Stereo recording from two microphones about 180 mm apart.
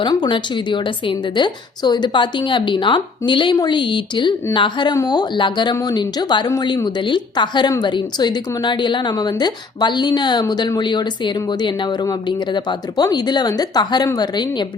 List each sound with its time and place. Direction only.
0.0 s a woman's voice: 25° left (ahead or behind)